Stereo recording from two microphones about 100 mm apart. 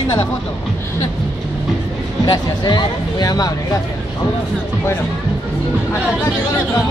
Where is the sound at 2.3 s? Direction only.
45° left (ahead or behind).